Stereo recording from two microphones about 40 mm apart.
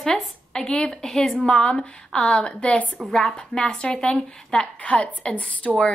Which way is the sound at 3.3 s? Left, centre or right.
Left.